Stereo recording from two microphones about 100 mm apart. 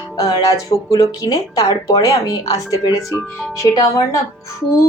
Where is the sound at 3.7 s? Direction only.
30° left (ahead or behind).